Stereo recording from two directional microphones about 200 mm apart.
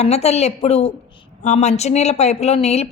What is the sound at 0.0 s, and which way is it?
Speech, 30° left (ahead or behind).